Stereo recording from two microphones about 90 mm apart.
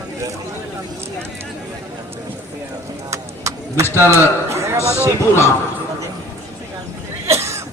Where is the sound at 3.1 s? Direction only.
35° right (ahead or behind).